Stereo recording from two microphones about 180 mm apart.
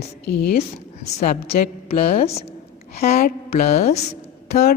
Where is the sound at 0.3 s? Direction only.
60° left (ahead or behind).